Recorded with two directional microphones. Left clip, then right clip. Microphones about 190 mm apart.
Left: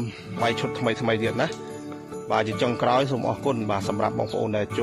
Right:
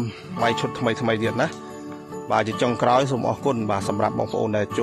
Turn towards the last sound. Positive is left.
turn(degrees=-20)  # may be behind; listen again after turning